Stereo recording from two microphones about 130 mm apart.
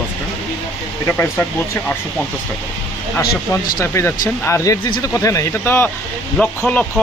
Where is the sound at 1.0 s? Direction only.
15° left (ahead or behind).